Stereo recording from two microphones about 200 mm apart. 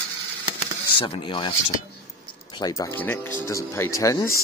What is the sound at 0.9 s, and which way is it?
Speech, 25° left (ahead or behind).